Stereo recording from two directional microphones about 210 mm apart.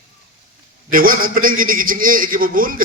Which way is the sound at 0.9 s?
40° right (ahead or behind).